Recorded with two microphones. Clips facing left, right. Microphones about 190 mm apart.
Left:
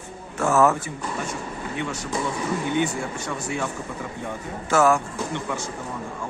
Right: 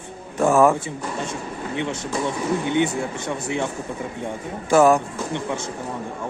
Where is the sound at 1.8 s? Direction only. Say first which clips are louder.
Right 3 dB; 25° right (ahead or behind).